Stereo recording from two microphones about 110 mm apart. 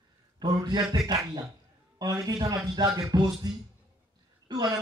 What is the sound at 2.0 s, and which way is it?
A man's voice, 35° right (ahead or behind).